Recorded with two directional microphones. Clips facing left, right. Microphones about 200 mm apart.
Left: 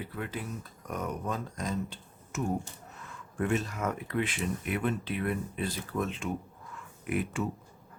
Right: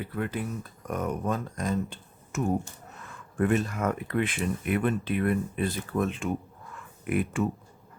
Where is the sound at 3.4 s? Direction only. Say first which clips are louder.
Right 5 dB; 55° right (ahead or behind).